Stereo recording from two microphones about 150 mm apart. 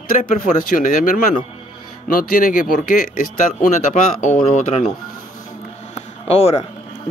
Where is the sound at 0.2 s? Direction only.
65° left (ahead or behind).